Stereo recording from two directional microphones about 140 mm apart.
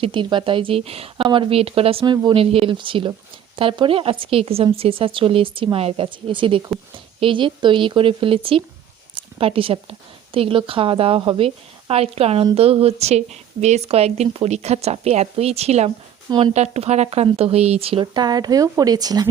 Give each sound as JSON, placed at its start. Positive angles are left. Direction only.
{"t": 0.0, "sound": "a woman's voice", "side_deg": -35}